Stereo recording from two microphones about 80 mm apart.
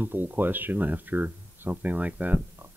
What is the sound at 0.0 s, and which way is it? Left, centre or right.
Speech, right.